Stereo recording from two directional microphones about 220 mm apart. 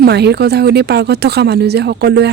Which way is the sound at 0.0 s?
50° right (ahead or behind).